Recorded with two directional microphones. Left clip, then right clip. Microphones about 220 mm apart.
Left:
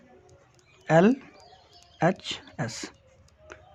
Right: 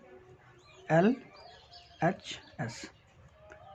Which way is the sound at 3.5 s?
35° left (ahead or behind).